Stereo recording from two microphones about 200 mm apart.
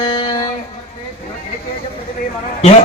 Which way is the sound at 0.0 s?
25° left (ahead or behind).